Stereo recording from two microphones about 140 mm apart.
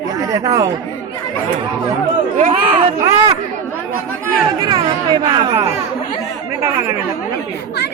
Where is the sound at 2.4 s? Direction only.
65° right (ahead or behind).